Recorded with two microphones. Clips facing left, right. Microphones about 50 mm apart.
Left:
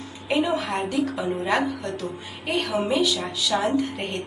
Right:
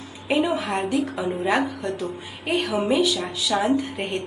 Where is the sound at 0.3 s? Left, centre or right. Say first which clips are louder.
Right 1 dB; centre.